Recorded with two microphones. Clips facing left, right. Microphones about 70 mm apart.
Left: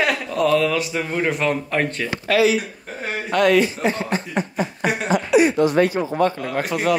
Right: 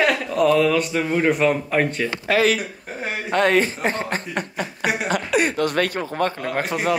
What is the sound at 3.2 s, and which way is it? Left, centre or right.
Speech, right.